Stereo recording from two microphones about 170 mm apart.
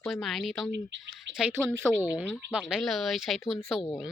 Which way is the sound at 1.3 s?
90° right.